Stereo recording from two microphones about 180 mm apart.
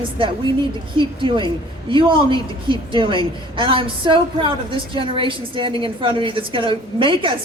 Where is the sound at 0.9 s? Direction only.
25° right (ahead or behind).